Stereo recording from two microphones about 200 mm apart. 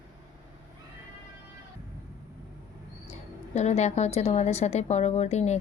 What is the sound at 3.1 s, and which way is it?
A woman's voice, 35° left (ahead or behind).